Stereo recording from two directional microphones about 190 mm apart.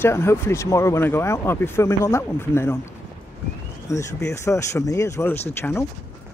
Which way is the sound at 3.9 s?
15° left (ahead or behind).